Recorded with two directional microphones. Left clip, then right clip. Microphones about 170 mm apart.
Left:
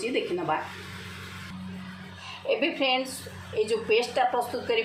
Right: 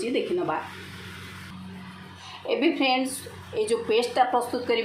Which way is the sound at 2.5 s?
20° right (ahead or behind).